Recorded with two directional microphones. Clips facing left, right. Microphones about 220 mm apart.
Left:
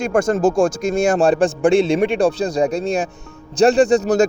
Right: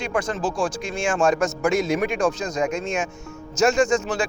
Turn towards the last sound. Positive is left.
turn(degrees=40)  # may be behind; listen again after turning